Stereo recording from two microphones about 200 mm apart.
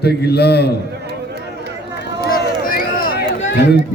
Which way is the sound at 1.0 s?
55° right (ahead or behind).